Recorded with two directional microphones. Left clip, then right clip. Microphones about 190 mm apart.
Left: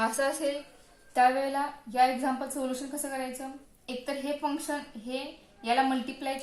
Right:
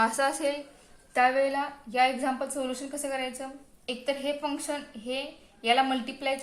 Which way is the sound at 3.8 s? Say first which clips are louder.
Right 4 dB; 45° right (ahead or behind).